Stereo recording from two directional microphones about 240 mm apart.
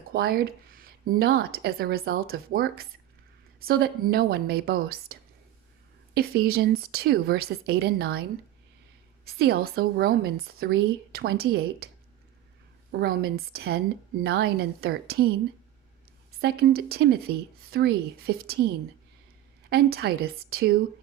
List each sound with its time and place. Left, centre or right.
0.1 s speech: right
6.1 s speech: right
9.2 s speech: right
12.9 s speech: right
16.4 s speech: right
19.7 s speech: right